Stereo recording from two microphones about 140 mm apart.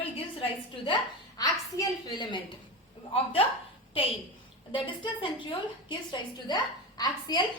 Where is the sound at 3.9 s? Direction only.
40° left (ahead or behind).